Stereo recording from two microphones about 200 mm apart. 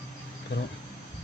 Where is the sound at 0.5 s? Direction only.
55° left (ahead or behind).